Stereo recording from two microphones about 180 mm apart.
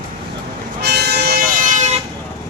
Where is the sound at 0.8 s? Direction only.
65° right (ahead or behind); by 2.0 s 40° right (ahead or behind).